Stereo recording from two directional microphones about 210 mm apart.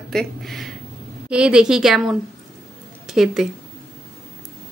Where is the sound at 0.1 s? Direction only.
Centre (ahead or behind).